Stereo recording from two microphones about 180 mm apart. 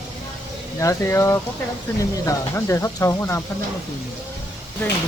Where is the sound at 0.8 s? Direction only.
15° left (ahead or behind).